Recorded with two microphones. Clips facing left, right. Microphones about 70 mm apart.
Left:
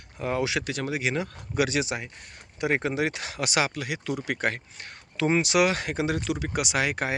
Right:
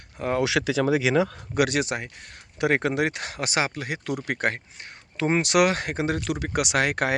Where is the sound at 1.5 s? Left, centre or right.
Right.